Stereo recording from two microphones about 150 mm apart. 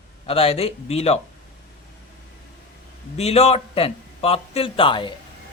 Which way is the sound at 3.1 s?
45° left (ahead or behind).